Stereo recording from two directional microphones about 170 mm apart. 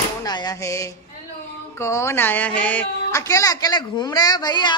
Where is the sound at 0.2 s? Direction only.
25° left (ahead or behind).